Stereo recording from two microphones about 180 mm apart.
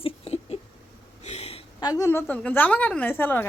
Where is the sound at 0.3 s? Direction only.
35° left (ahead or behind).